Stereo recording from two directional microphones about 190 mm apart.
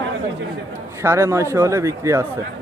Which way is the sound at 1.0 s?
15° right (ahead or behind).